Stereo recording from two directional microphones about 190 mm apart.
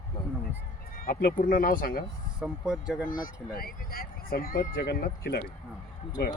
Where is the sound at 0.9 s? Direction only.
50° left (ahead or behind).